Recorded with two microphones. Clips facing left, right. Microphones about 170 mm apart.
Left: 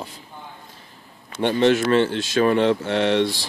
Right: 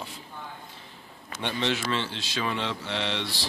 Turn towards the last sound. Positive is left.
turn(degrees=50)  # may be behind; listen again after turning